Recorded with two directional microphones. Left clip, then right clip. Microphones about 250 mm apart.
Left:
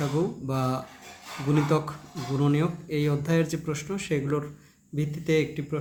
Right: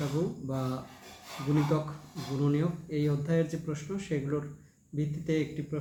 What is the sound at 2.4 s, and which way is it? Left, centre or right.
Speech, left.